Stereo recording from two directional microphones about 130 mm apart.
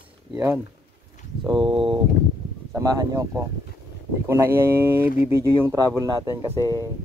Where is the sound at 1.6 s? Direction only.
40° right (ahead or behind).